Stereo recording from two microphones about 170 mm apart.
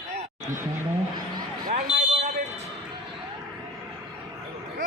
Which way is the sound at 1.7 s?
40° right (ahead or behind).